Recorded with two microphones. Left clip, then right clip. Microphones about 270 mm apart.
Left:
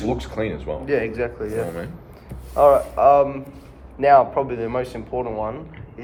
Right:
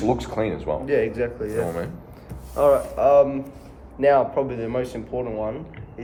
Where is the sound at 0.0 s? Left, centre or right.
Centre.